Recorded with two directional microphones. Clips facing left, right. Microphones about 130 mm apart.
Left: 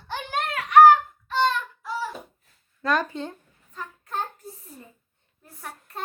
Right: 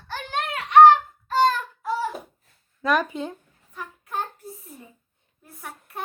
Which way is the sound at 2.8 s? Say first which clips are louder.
Right 2 dB; 15° right (ahead or behind).